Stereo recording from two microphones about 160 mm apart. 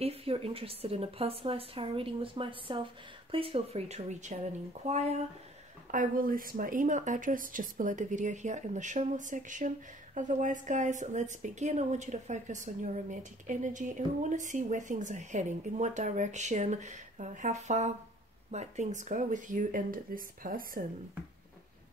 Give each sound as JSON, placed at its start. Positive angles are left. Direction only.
{"t": 0.0, "sound": "speech", "side_deg": -40}
{"t": 5.9, "sound": "a woman's voice", "side_deg": -55}